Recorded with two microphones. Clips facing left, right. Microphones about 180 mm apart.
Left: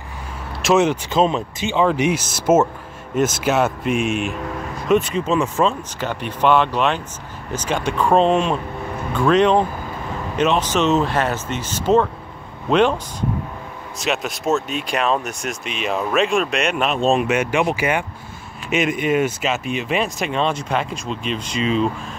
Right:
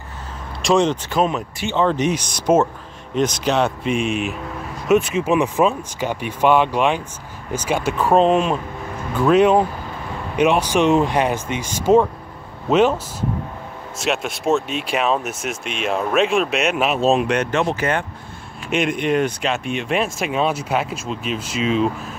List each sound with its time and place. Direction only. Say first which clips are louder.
0.6 s speech: left 1 dB; 5° left (ahead or behind)
1.1 s speech: left 2 dB; 25° left (ahead or behind)
1.7 s speech: left 1 dB; 10° left (ahead or behind)
5.2 s speech: right 2 dB; 15° right (ahead or behind)